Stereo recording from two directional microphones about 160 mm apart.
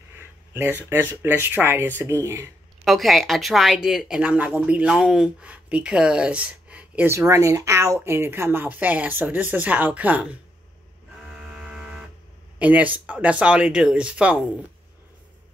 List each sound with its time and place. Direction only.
0.6 s a woman's voice: 15° right (ahead or behind)
2.8 s a woman's voice: centre (ahead or behind)
11.2 s vehicle: 5° right (ahead or behind)
12.5 s a woman's voice: 10° right (ahead or behind)